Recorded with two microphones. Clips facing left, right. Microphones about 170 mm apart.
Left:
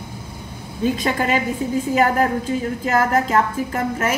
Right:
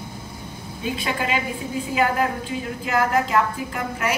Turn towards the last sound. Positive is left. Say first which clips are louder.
# left 5 dB
turn(degrees=45)  # may be behind; listen again after turning